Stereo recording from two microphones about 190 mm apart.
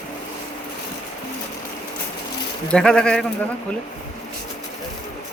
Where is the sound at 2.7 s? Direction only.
5° left (ahead or behind).